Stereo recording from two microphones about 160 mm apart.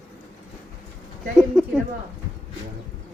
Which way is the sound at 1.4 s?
Centre (ahead or behind).